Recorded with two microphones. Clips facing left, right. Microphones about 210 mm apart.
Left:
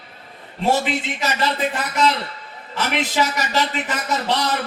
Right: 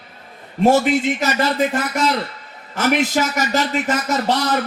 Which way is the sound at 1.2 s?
45° right (ahead or behind).